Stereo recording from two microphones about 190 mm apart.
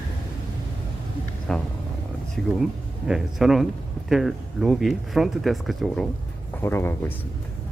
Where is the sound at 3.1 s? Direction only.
Centre (ahead or behind).